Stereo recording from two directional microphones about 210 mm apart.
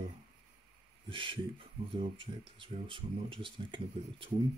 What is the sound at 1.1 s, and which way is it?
Speech, 25° right (ahead or behind).